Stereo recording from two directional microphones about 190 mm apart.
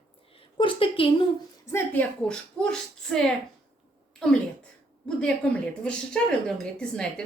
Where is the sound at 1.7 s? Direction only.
10° left (ahead or behind).